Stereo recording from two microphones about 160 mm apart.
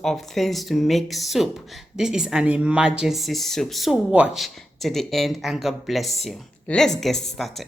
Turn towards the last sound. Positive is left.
turn(degrees=0)  # may be behind; listen again after turning